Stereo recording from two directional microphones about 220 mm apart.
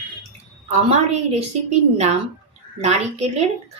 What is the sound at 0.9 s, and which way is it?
Speech, 30° right (ahead or behind).